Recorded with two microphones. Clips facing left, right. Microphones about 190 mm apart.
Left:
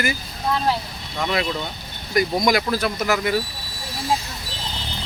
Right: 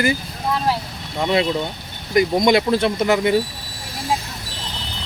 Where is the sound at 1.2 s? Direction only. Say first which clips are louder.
Right 5 dB; 25° right (ahead or behind).